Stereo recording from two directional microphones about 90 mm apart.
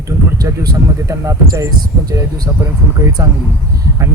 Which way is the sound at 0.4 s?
40° right (ahead or behind).